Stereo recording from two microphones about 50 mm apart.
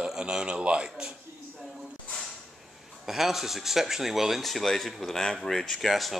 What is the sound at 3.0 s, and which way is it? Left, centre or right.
Speech, centre.